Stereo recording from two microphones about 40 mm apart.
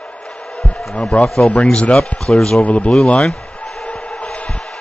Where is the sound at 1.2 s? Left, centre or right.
Centre.